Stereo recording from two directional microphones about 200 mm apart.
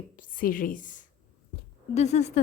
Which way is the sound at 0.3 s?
45° left (ahead or behind).